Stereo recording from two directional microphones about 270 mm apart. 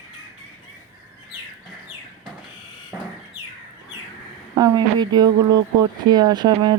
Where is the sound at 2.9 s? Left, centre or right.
Centre.